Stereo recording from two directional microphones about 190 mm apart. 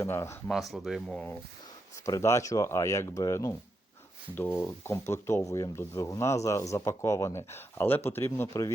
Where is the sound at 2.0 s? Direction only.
15° left (ahead or behind).